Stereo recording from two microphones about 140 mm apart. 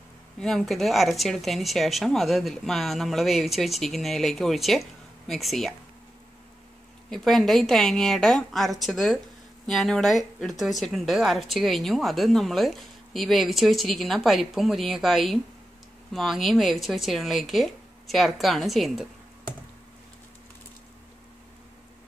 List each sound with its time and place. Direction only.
0.4 s speech: centre (ahead or behind)
7.1 s speech: centre (ahead or behind)